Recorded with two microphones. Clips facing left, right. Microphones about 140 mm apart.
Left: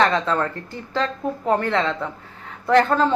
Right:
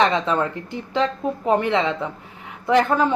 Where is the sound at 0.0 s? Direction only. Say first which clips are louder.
Even; 15° right (ahead or behind).